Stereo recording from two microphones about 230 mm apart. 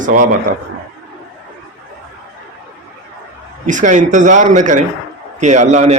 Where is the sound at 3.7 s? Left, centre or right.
Right.